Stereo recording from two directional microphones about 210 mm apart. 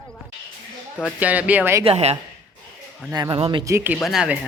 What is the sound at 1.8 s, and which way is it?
Speech, 30° right (ahead or behind).